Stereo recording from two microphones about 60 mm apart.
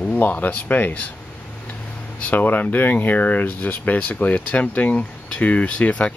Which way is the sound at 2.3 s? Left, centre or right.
Left.